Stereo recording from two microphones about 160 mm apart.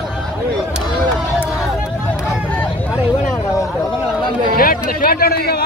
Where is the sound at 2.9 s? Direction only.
Centre (ahead or behind).